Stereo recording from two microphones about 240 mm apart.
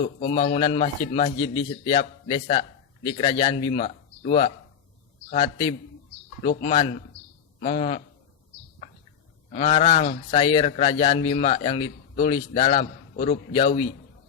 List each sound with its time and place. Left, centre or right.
0.0 s a man's voice: left
9.6 s a man's voice: left
13.1 s a man's voice: left